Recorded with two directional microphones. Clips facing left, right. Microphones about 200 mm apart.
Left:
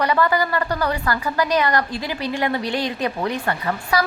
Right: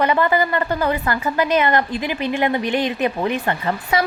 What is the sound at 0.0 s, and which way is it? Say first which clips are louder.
A woman's voice: right 2 dB; 20° right (ahead or behind).